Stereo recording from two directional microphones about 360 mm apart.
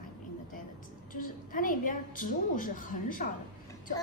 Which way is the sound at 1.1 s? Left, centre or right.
Left.